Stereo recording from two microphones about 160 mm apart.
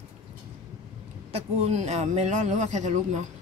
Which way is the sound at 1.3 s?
40° right (ahead or behind).